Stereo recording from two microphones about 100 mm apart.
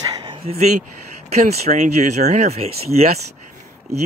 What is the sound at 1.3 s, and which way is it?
Speech, 90° right.